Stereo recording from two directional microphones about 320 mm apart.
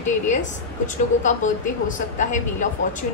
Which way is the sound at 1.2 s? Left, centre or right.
Left.